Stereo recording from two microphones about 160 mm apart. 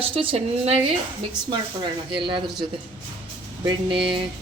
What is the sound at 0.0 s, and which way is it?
Speech, 35° right (ahead or behind).